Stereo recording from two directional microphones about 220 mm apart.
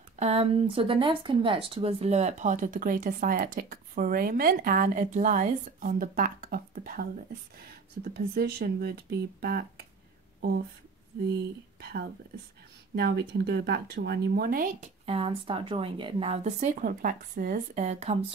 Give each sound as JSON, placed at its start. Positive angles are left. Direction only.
{"t": 0.2, "sound": "speech", "side_deg": -30}
{"t": 11.8, "sound": "speech", "side_deg": -45}
{"t": 15.0, "sound": "a woman's voice", "side_deg": -25}